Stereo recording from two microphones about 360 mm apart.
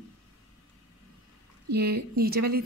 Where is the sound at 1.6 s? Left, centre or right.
Right.